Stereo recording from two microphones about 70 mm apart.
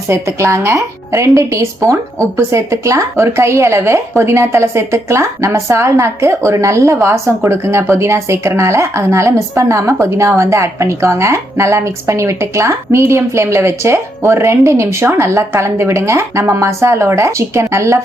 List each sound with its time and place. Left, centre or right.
0.1 s a woman's voice: right